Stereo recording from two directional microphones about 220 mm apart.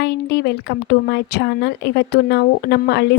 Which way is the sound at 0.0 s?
50° left (ahead or behind).